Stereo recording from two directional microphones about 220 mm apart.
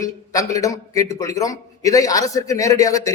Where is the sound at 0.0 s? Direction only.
15° left (ahead or behind).